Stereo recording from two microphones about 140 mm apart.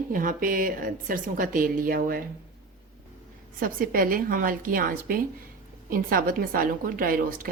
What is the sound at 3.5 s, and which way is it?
A woman's voice, 85° right.